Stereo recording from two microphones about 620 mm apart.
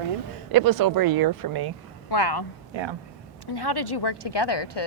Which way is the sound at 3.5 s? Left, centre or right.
Left.